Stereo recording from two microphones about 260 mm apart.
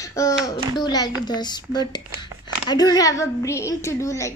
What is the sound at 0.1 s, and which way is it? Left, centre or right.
Speech, centre.